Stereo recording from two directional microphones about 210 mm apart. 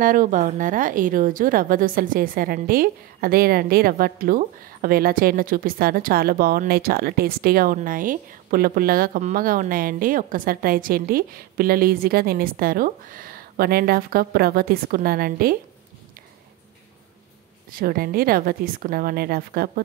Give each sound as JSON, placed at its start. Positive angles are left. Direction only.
{"t": 0.0, "sound": "a woman's voice", "side_deg": -40}
{"t": 17.6, "sound": "a woman's voice", "side_deg": -45}